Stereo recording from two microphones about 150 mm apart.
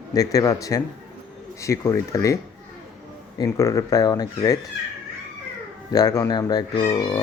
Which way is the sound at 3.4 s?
20° left (ahead or behind).